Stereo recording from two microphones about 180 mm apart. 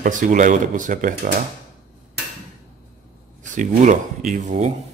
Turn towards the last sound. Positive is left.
turn(degrees=-40)  # may be behind; listen again after turning